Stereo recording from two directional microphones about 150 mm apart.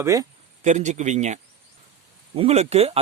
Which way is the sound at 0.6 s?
50° right (ahead or behind).